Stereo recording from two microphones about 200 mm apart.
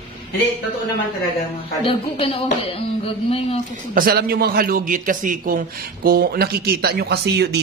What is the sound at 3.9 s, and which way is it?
Speech, 45° right (ahead or behind).